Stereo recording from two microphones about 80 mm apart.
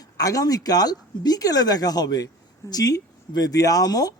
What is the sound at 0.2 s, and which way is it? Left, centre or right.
A man's voice, left.